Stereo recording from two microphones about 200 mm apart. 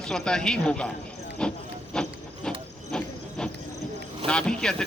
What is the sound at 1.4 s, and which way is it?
Horse, 5° left (ahead or behind).